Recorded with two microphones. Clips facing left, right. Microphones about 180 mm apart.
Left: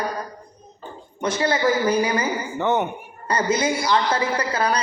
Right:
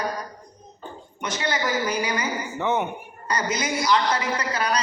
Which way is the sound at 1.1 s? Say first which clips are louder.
Left 5 dB; 30° left (ahead or behind).